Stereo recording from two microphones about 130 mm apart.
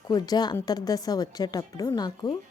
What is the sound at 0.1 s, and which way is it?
A woman's voice, 30° left (ahead or behind).